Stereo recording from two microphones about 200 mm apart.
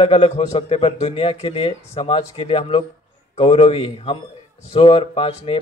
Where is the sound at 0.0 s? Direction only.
30° left (ahead or behind).